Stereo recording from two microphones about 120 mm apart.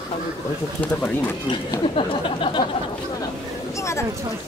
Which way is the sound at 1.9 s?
50° left (ahead or behind).